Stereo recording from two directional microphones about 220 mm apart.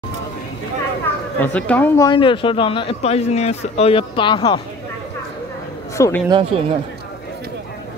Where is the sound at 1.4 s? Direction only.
10° left (ahead or behind).